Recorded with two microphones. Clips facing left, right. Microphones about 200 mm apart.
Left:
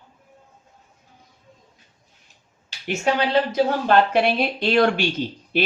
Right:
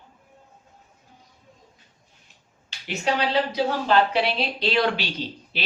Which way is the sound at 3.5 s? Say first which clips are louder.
Left 3 dB; 50° left (ahead or behind).